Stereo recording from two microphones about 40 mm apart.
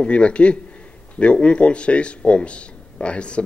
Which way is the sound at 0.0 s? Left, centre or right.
Left.